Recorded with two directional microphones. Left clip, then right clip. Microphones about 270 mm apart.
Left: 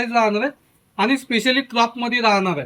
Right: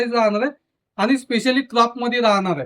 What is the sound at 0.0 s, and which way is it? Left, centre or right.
Speech, centre.